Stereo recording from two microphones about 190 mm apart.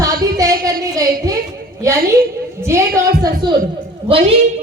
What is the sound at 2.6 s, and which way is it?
Speech, 15° right (ahead or behind).